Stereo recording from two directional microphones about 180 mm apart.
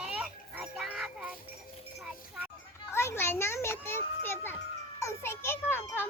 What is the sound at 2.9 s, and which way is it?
A child's voice, 15° left (ahead or behind).